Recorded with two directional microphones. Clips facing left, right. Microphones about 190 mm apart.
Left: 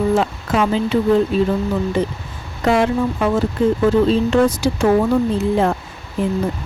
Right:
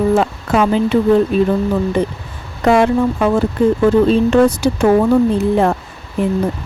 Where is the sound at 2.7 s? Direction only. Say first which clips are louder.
Right 4 dB; 55° right (ahead or behind).